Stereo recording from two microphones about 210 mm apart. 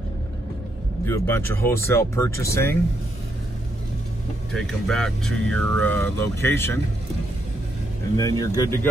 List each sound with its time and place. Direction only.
1.0 s speech: 10° left (ahead or behind)
4.5 s speech: centre (ahead or behind)
8.2 s speech: 15° left (ahead or behind)